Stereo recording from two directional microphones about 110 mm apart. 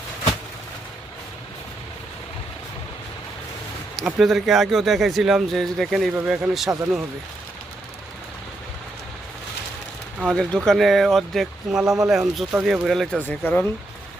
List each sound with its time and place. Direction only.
3.9 s speech: centre (ahead or behind)
6.1 s speech: 10° right (ahead or behind)
10.2 s speech: centre (ahead or behind)
13.1 s speech: 15° left (ahead or behind)